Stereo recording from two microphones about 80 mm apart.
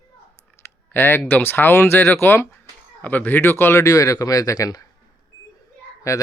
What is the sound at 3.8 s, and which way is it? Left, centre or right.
Speech, left.